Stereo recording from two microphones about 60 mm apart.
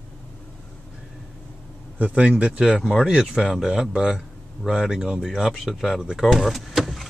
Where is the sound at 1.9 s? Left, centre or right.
Right; by 6.0 s centre.